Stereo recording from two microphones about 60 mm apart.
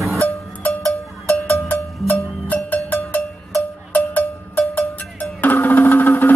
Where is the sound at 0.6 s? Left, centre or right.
Left.